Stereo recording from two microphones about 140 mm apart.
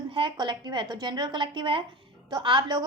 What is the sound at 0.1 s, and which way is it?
A woman's voice, 35° right (ahead or behind).